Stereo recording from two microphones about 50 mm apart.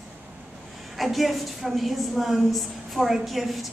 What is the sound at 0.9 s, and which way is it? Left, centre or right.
A woman's voice, centre.